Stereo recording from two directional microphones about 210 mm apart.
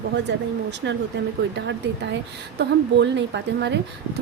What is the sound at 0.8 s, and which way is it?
Speech, 55° right (ahead or behind).